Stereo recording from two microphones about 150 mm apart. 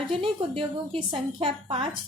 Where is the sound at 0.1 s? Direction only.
40° right (ahead or behind).